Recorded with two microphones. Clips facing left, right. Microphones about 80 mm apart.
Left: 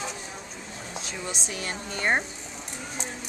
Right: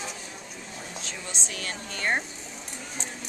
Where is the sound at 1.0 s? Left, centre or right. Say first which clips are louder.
Left 3 dB; centre.